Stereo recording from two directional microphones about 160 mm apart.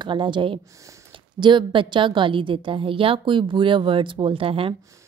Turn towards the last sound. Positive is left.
turn(degrees=-35)  # may be behind; listen again after turning